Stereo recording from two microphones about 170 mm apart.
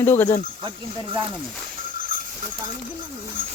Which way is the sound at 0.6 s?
25° right (ahead or behind).